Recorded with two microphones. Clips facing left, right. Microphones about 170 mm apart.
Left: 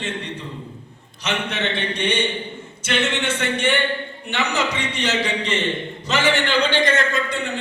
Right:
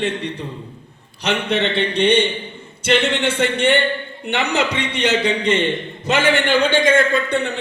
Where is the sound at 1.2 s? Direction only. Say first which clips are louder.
Right 5 dB; 60° right (ahead or behind).